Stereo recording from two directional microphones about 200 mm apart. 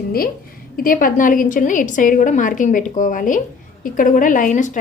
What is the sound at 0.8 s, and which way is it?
A woman's voice, 45° left (ahead or behind).